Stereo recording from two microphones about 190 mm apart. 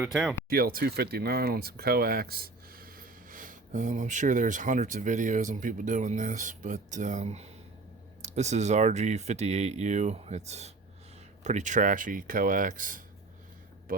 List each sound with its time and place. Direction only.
0.0 s speech: centre (ahead or behind)
0.5 s speech: 50° right (ahead or behind)